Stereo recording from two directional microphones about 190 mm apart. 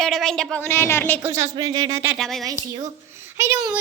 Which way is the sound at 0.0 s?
Centre (ahead or behind).